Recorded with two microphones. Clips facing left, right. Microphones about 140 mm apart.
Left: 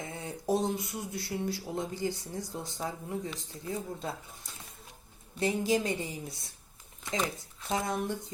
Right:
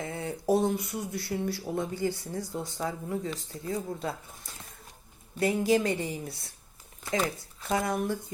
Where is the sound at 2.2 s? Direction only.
50° right (ahead or behind).